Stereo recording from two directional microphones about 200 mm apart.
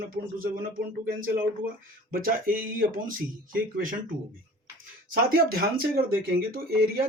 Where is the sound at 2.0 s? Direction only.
45° right (ahead or behind).